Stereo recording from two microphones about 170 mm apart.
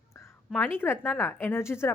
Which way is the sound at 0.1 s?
15° left (ahead or behind).